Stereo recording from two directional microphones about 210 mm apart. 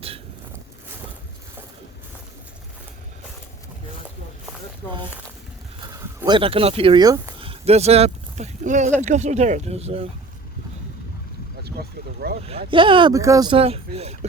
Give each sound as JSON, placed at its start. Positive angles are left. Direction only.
{"t": 5.9, "sound": "speech", "side_deg": -15}
{"t": 11.6, "sound": "speech", "side_deg": -50}
{"t": 12.5, "sound": "speech", "side_deg": -25}